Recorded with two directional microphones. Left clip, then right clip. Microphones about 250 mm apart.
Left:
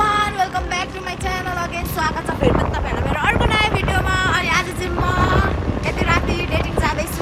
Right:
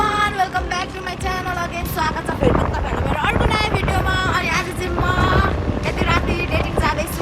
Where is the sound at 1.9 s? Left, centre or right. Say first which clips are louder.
Even; centre.